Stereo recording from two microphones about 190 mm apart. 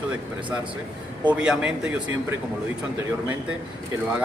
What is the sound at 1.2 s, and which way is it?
Speech, 5° right (ahead or behind).